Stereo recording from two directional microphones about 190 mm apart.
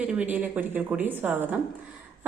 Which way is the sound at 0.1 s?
5° right (ahead or behind).